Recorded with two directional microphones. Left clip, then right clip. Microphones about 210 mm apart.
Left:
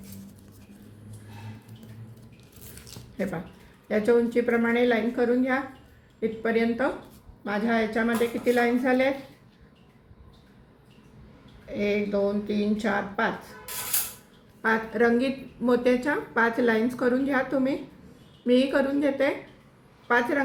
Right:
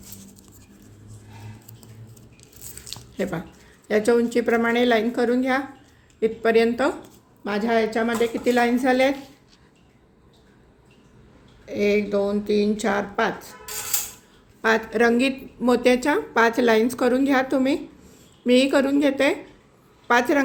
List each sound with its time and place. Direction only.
3.8 s a woman's voice: 50° right (ahead or behind)
11.7 s a woman's voice: 50° right (ahead or behind)
14.6 s a woman's voice: 50° right (ahead or behind)